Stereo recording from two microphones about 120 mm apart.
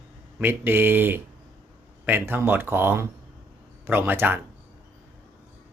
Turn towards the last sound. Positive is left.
turn(degrees=-15)  # may be behind; listen again after turning